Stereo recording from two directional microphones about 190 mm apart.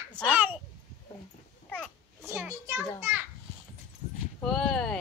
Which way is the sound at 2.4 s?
15° right (ahead or behind).